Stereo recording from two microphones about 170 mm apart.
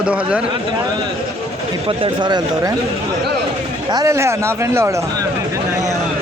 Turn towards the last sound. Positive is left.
turn(degrees=-15)  # may be behind; listen again after turning